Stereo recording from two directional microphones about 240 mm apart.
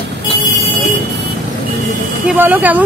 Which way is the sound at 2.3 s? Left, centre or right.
Centre.